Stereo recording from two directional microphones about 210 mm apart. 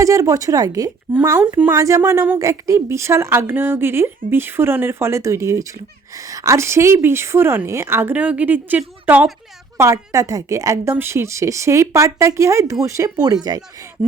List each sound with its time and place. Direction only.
0.0 s a woman's voice: 15° right (ahead or behind)